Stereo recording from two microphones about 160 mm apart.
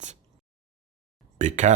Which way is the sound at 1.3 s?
50° right (ahead or behind).